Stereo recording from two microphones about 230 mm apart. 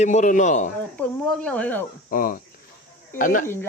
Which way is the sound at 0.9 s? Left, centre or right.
Centre.